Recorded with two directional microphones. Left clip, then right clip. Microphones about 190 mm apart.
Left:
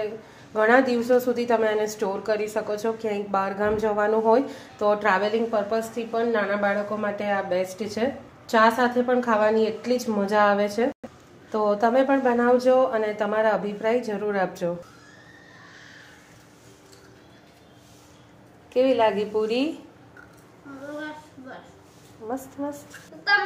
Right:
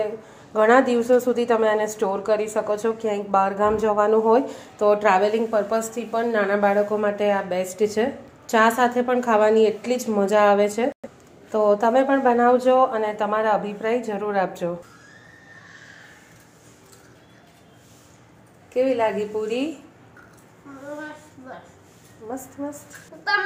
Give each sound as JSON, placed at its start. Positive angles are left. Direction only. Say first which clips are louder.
{"t": 0.5, "sound": "a woman's voice", "louder": "right 3 dB", "side_deg": -15}
{"t": 18.7, "sound": "a woman's voice", "louder": "left 1 dB", "side_deg": 5}
{"t": 22.3, "sound": "a woman's voice", "louder": "left 1 dB", "side_deg": 0}